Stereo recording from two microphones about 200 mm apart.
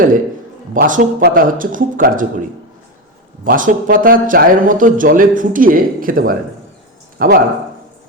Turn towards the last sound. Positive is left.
turn(degrees=-45)  # may be behind; listen again after turning